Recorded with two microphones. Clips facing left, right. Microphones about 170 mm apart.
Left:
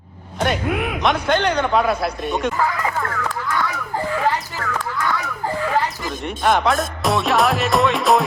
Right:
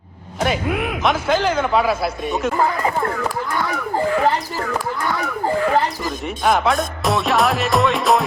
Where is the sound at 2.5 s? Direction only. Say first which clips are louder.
Right 2 dB; 30° right (ahead or behind).